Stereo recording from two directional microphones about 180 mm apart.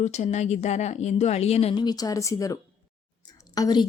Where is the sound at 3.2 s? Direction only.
20° left (ahead or behind).